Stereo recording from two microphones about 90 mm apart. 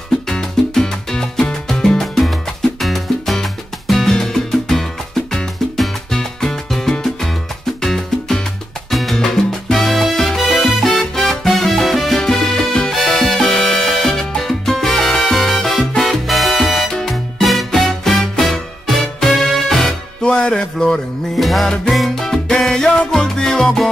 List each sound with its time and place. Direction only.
0.3 s music: 5° left (ahead or behind)
8.9 s salsa music: centre (ahead or behind)
19.1 s music: 5° left (ahead or behind)